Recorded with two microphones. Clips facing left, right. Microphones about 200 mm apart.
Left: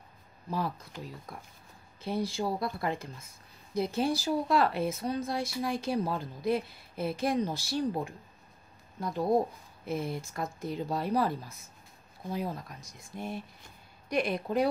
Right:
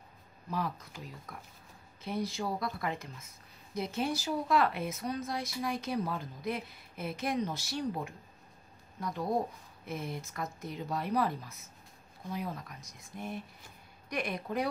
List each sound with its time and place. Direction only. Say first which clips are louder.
0.5 s a woman's voice: left 2 dB; 30° left (ahead or behind)